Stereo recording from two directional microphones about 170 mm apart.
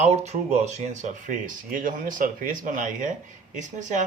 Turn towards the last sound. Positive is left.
turn(degrees=-45)  # may be behind; listen again after turning